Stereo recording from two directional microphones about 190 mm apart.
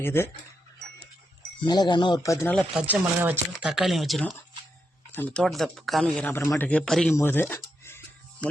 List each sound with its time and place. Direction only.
0.0 s speech: 10° left (ahead or behind)
1.6 s speech: 25° left (ahead or behind)
2.8 s a man's voice: 10° right (ahead or behind)
7.2 s a sound: 10° left (ahead or behind)